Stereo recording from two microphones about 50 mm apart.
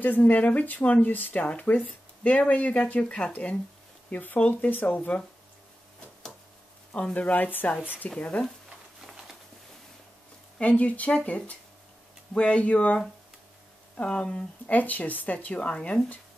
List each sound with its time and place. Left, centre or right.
0.0 s speech: left
4.1 s speech: left
4.4 s speech: left
7.2 s speech: left
8.6 s a sound: centre
10.6 s speech: left